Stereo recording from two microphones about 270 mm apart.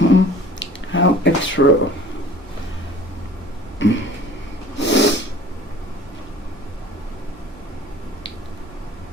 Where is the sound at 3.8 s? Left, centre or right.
Left.